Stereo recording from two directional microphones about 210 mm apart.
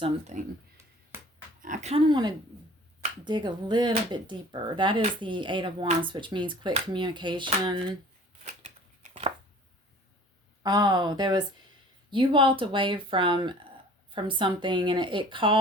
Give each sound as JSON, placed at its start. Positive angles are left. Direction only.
{"t": 0.0, "sound": "speech", "side_deg": -30}
{"t": 1.6, "sound": "speech", "side_deg": -35}
{"t": 8.6, "sound": "scissors", "side_deg": -30}
{"t": 10.6, "sound": "speech", "side_deg": -20}